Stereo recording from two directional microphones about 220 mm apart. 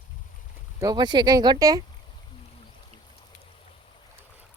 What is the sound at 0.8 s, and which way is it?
Speech, 20° right (ahead or behind).